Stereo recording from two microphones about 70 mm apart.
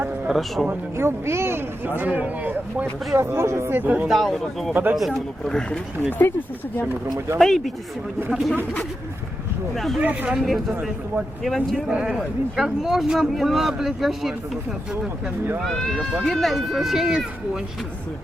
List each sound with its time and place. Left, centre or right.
0.3 s speech: centre
0.9 s speech: right
3.2 s speech: right
4.1 s speech: centre
4.7 s speech: right
5.1 s speech: centre
7.3 s speech: centre
8.3 s speech: centre
9.7 s speech: centre
10.0 s speech: centre
11.4 s speech: centre
11.9 s speech: centre
15.6 s speech: centre